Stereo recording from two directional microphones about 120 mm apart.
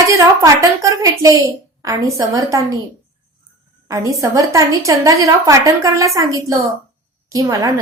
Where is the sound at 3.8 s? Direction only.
25° right (ahead or behind).